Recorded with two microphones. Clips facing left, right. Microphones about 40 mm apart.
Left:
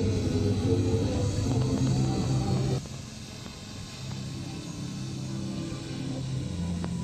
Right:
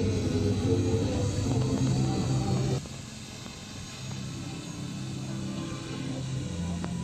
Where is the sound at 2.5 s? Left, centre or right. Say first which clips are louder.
Even; centre.